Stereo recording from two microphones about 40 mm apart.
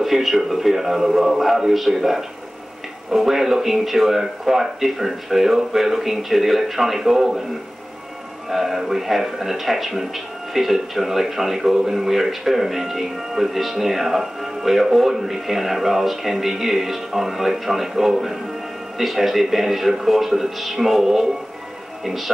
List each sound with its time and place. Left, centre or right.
0.0 s speech: centre
8.5 s speech: centre